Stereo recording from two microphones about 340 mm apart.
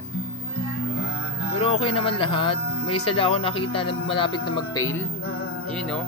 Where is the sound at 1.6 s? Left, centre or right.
Centre.